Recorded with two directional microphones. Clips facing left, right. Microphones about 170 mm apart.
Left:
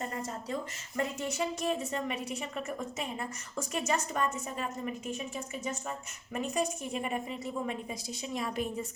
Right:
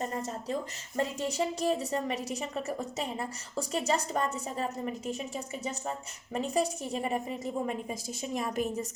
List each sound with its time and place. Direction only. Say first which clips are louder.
0.9 s a woman's voice: right 2 dB; 35° right (ahead or behind)
6.3 s a woman's voice: right 3 dB; 35° right (ahead or behind)